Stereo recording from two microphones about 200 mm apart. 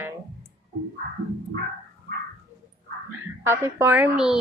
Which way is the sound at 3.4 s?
10° right (ahead or behind).